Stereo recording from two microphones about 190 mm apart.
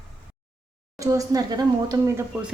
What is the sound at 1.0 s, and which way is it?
Speech, 15° right (ahead or behind).